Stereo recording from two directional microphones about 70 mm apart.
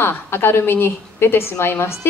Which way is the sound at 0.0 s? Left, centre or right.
Left.